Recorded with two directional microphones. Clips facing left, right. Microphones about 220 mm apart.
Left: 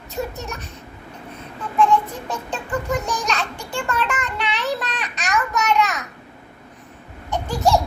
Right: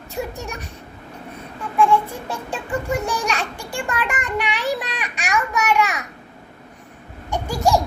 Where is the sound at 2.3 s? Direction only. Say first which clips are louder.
Even; 10° right (ahead or behind).